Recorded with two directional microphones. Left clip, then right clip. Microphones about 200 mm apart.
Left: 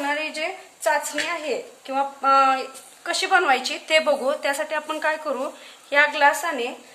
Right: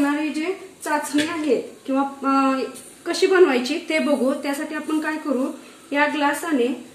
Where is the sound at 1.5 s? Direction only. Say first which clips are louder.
Right 4 dB; 35° left (ahead or behind).